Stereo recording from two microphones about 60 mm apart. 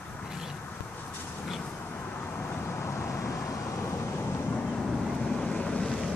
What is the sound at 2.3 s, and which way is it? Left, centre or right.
Vehicle, left.